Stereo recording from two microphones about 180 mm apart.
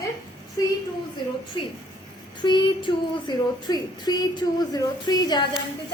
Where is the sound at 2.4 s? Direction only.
25° left (ahead or behind).